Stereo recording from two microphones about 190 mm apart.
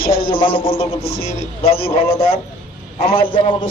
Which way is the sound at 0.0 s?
50° left (ahead or behind).